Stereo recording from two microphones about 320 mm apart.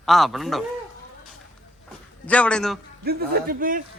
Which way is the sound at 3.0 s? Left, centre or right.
Right.